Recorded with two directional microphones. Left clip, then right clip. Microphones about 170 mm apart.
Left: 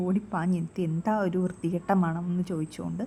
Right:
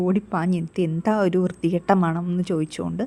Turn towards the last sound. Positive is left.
turn(degrees=-30)  # may be behind; listen again after turning